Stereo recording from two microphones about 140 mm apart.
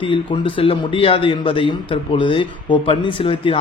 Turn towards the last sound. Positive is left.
turn(degrees=40)  # may be behind; listen again after turning